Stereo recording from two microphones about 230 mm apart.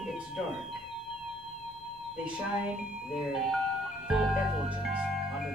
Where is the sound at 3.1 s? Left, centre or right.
Centre.